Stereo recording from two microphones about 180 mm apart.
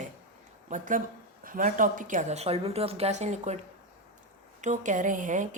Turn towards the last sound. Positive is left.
turn(degrees=-45)  # may be behind; listen again after turning